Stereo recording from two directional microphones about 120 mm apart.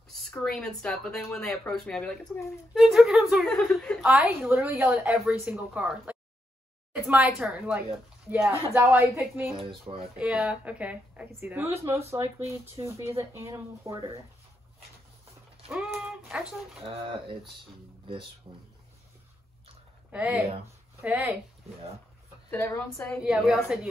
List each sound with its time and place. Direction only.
0.3 s speech: 5° left (ahead or behind)
4.1 s speech: 10° right (ahead or behind)
5.1 s speech: 10° right (ahead or behind)
9.6 s speech: 50° right (ahead or behind)
10.1 s speech: 10° right (ahead or behind); by 14.1 s 25° right (ahead or behind)
16.1 s speech: 5° right (ahead or behind)
16.8 s speech: 50° right (ahead or behind)
18.4 s speech: 30° right (ahead or behind)
20.1 s speech: 10° right (ahead or behind)
22.5 s a woman's voice: 20° left (ahead or behind)
23.2 s speech: centre (ahead or behind)